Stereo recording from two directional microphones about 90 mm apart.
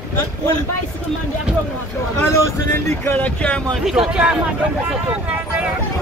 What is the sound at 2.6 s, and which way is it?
Speech, 25° left (ahead or behind).